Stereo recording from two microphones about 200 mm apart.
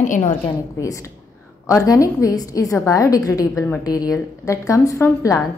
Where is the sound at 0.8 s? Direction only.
15° left (ahead or behind).